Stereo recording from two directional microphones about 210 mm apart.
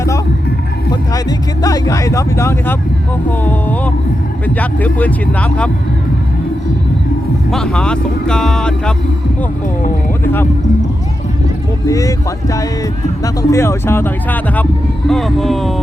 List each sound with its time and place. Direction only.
1.6 s speech: 15° left (ahead or behind)
7.5 s speech: 5° left (ahead or behind)
11.9 s speech: 15° left (ahead or behind)